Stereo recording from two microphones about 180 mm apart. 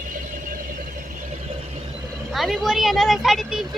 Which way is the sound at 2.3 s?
Centre (ahead or behind).